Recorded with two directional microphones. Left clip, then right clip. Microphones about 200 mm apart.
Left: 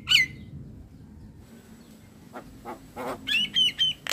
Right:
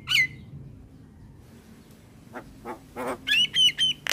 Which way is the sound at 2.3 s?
20° right (ahead or behind).